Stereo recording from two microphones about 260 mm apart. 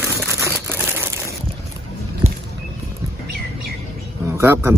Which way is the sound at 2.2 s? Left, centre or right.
Right.